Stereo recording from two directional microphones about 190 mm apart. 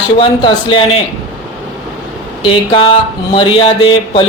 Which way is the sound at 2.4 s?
25° left (ahead or behind).